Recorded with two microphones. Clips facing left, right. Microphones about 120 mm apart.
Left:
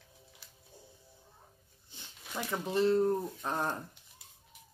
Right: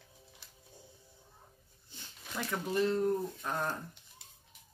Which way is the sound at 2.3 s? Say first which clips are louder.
Left 1 dB; 20° left (ahead or behind).